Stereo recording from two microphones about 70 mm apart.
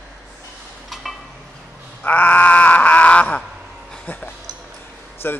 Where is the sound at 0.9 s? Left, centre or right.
Centre.